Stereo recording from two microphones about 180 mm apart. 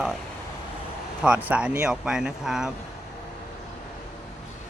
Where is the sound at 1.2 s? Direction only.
5° right (ahead or behind).